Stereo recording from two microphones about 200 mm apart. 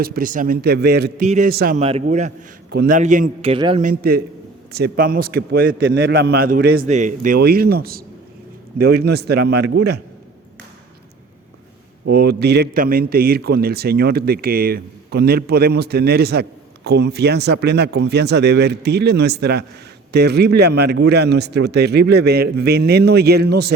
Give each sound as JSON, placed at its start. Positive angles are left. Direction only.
{"t": 0.0, "sound": "a man's voice", "side_deg": -45}
{"t": 1.2, "sound": "a man's voice", "side_deg": -40}
{"t": 1.8, "sound": "a man's voice", "side_deg": -30}
{"t": 2.6, "sound": "a man's voice", "side_deg": -50}
{"t": 3.5, "sound": "a man's voice", "side_deg": -25}
{"t": 3.8, "sound": "a man's voice", "side_deg": -45}
{"t": 5.8, "sound": "a man's voice", "side_deg": -65}
{"t": 6.8, "sound": "a man's voice", "side_deg": -35}
{"t": 12.0, "sound": "a man's voice", "side_deg": -50}